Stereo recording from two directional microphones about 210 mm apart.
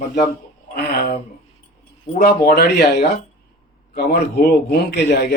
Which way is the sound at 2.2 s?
50° left (ahead or behind).